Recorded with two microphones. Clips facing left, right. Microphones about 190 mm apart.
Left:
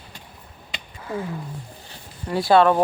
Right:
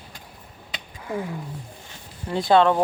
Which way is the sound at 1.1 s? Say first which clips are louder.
Even; 20° right (ahead or behind).